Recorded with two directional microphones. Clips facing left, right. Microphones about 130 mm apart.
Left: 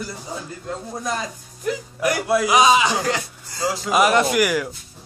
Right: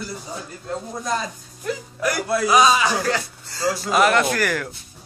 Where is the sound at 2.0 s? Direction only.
15° left (ahead or behind).